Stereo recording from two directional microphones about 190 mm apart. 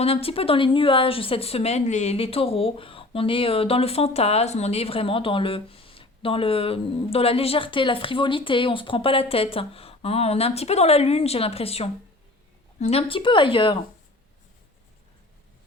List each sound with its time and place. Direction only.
0.0 s a woman's voice: 30° left (ahead or behind)